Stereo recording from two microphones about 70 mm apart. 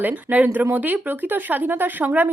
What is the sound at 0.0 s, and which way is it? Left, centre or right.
Speech, right.